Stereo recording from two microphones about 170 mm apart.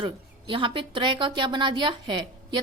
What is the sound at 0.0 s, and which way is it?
A woman's voice, 30° right (ahead or behind).